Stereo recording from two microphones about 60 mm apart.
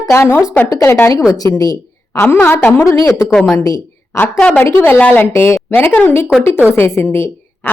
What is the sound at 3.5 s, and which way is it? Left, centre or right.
Speech, left.